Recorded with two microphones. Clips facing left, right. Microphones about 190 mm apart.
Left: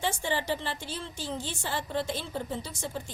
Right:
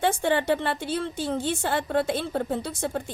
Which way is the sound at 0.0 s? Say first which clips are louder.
Right 7 dB; 55° right (ahead or behind).